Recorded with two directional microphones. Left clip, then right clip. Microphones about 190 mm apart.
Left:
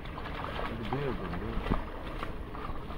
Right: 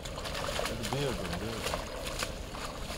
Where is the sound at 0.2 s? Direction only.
40° right (ahead or behind).